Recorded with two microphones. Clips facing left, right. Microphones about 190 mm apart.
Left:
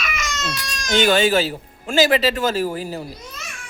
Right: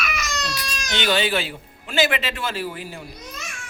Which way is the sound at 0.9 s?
45° left (ahead or behind).